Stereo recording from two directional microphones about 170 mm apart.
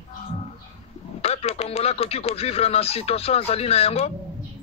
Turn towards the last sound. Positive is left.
turn(degrees=35)  # may be behind; listen again after turning